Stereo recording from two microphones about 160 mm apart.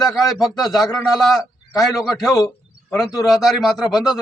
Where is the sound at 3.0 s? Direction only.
Centre (ahead or behind).